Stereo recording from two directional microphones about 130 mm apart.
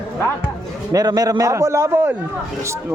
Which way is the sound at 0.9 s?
30° right (ahead or behind).